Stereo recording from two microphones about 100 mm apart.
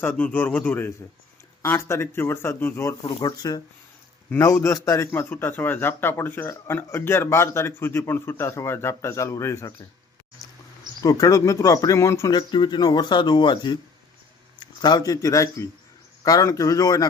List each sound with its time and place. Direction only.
0.0 s speech: 20° left (ahead or behind); by 3.6 s 40° left (ahead or behind)
4.5 s speech: 30° left (ahead or behind)
11.0 s speech: 35° left (ahead or behind)
12.3 s a man's voice: 50° left (ahead or behind)